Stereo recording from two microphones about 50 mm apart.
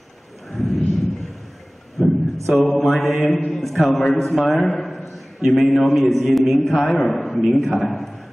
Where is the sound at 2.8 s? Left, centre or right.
Centre.